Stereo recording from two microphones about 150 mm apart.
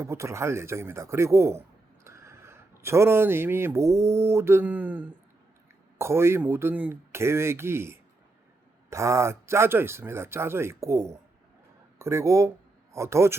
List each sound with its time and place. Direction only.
0.0 s a man's voice: 20° right (ahead or behind)